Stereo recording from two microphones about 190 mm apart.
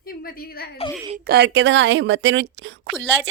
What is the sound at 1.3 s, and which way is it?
A woman's voice, 60° right (ahead or behind).